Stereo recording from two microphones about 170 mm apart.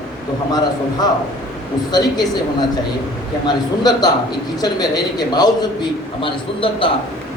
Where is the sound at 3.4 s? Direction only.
25° left (ahead or behind).